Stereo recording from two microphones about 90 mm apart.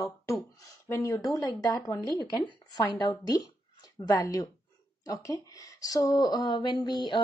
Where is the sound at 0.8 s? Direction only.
30° left (ahead or behind).